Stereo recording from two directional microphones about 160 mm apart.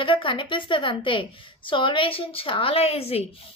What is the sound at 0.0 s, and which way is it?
A woman's voice, 35° left (ahead or behind).